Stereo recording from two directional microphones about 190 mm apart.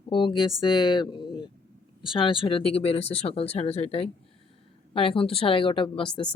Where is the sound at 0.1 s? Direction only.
25° left (ahead or behind).